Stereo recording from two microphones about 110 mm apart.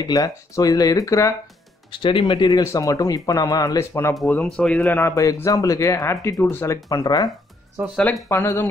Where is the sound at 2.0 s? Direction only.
50° left (ahead or behind).